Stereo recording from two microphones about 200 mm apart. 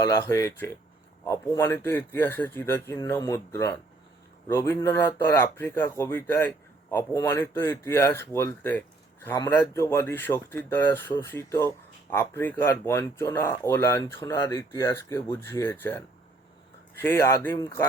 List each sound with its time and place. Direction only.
0.0 s speech: 15° left (ahead or behind)